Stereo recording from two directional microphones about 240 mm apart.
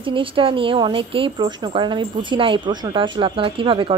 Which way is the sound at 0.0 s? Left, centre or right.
Right.